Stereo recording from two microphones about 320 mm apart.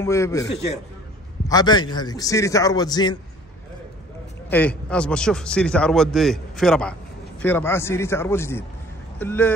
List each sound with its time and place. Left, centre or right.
0.0 s a man's voice: centre
1.5 s a man's voice: centre
4.5 s a man's voice: centre